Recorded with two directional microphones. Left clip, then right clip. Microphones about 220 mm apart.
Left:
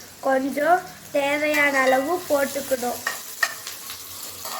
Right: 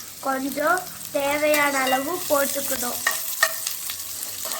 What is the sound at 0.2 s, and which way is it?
Stir, centre (ahead or behind).